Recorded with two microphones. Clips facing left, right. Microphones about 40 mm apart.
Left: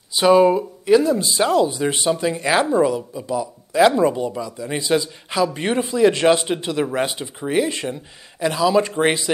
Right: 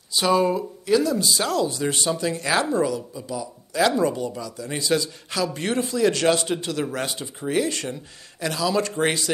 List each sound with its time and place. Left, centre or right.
0.1 s speech: left